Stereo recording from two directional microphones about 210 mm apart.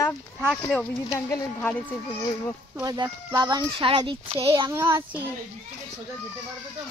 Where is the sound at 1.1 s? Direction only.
15° left (ahead or behind).